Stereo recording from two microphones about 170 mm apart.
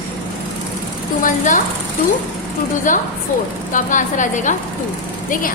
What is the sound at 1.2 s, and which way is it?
Speech, 50° left (ahead or behind).